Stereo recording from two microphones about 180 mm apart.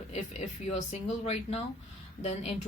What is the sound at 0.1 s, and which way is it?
Speech, 40° left (ahead or behind).